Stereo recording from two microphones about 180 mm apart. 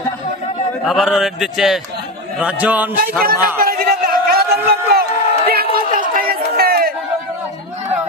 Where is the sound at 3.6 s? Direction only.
55° right (ahead or behind).